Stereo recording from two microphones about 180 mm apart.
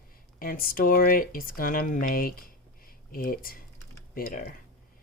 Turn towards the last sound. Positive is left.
turn(degrees=50)  # may be behind; listen again after turning